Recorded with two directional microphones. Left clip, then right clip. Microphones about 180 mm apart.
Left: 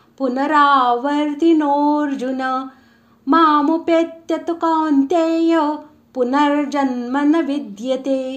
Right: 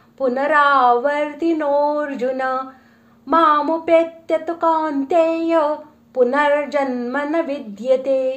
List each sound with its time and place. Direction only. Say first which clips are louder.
0.2 s speech: even; 35° left (ahead or behind)